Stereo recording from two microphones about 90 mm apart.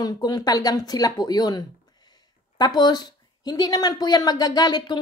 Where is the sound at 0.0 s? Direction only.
50° left (ahead or behind).